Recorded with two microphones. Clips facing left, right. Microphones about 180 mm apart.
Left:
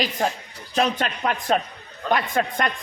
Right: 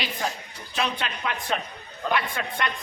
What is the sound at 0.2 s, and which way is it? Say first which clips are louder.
A woman's voice: left 6 dB; 45° left (ahead or behind).